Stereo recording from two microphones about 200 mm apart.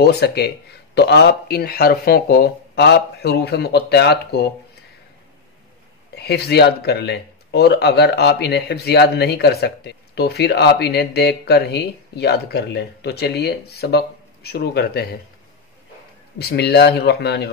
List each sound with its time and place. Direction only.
0.0 s speech: 55° left (ahead or behind)
6.1 s speech: 55° left (ahead or behind)
16.3 s speech: 55° left (ahead or behind)